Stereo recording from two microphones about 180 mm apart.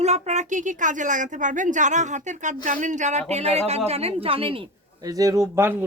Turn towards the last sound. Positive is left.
turn(degrees=-15)  # may be behind; listen again after turning